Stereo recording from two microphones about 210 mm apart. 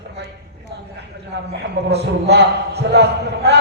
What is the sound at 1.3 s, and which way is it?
A man's voice, 50° right (ahead or behind).